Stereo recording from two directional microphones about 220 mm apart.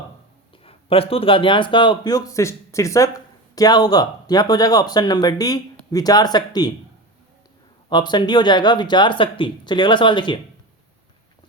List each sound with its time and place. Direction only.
0.6 s speech: 25° left (ahead or behind)
7.9 s speech: 20° left (ahead or behind)